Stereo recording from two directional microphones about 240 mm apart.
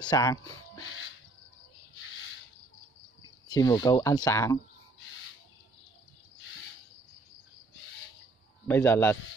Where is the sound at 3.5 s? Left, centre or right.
Centre.